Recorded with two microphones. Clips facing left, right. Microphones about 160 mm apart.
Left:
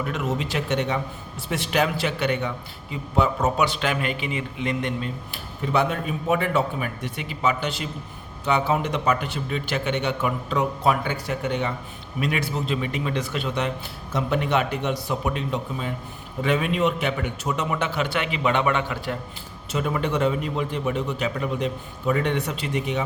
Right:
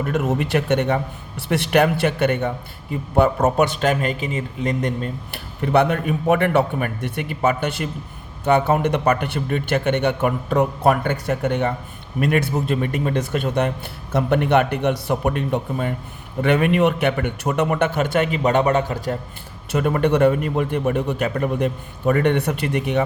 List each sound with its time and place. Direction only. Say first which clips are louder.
0.0 s a man's voice: right 5 dB; 50° right (ahead or behind)
1.4 s a man's voice: right 6 dB; 65° right (ahead or behind); by 5.1 s 45° right (ahead or behind)
5.3 s a man's voice: right 6 dB; 65° right (ahead or behind); by 19.1 s 40° right (ahead or behind)
19.7 s a man's voice: right 6 dB; 55° right (ahead or behind)